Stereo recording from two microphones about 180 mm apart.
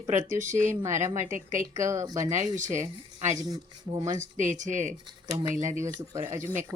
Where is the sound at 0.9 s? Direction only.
15° right (ahead or behind).